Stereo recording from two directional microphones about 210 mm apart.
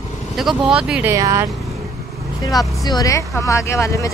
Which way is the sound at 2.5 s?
Centre (ahead or behind).